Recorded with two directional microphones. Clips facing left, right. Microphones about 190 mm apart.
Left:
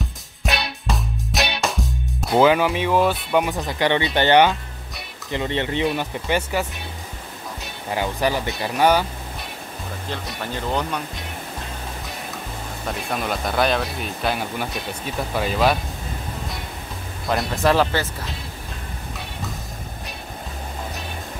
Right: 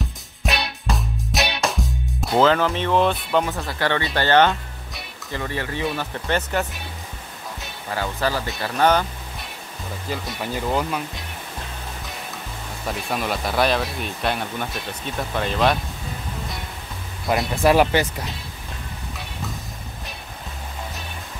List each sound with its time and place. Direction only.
0.5 s music: centre (ahead or behind)
2.2 s speech: 10° left (ahead or behind)
7.9 s speech: 15° left (ahead or behind)
10.0 s speech: 5° right (ahead or behind)
12.8 s speech: centre (ahead or behind)
17.3 s speech: 10° right (ahead or behind)